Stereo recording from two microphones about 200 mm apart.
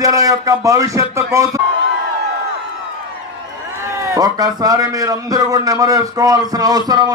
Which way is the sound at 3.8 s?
15° right (ahead or behind).